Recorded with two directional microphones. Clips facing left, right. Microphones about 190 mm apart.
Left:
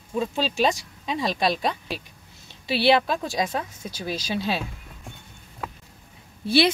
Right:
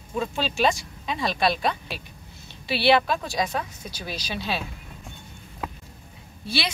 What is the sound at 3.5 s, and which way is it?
Speech, 25° left (ahead or behind).